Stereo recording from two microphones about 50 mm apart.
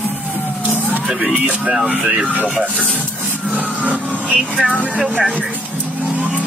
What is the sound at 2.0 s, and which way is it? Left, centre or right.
Speech, right.